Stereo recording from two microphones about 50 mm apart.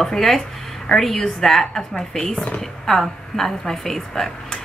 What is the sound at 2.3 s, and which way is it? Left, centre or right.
Speech, left.